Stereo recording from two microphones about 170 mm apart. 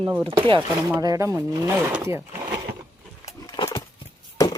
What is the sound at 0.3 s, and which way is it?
Speech, 30° right (ahead or behind).